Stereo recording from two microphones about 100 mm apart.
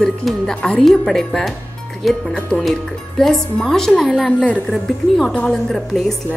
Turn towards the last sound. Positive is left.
turn(degrees=5)  # may be behind; listen again after turning